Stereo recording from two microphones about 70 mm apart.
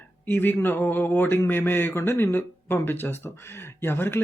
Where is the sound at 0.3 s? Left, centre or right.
Left.